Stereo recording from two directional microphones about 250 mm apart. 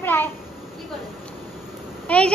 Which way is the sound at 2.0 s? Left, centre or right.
Centre.